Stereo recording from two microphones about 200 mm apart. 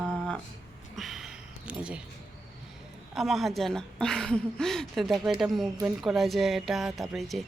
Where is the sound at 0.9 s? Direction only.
Centre (ahead or behind).